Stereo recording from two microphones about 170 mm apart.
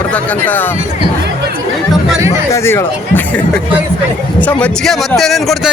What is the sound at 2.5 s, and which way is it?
Speech, 15° left (ahead or behind).